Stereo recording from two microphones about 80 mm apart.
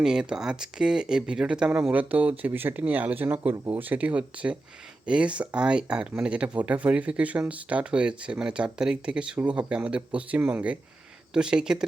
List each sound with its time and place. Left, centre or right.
0.0 s speech: centre